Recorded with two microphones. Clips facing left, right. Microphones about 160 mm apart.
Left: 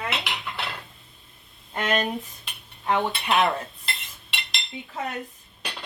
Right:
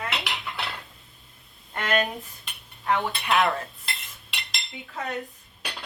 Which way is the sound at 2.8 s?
20° left (ahead or behind).